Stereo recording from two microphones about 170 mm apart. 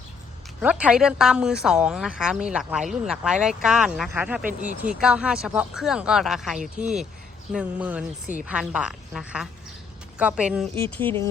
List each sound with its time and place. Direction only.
0.6 s a woman's voice: 5° right (ahead or behind)
6.8 s speech: 45° right (ahead or behind)
7.5 s a woman's voice: 10° right (ahead or behind)